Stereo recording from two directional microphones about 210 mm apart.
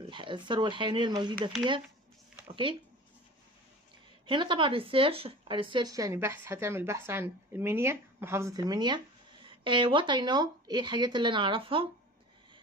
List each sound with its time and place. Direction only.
0.1 s speech: 25° right (ahead or behind)
4.3 s speech: 25° right (ahead or behind)